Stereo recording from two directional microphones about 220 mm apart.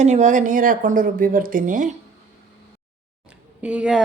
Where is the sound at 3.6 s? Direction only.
5° right (ahead or behind).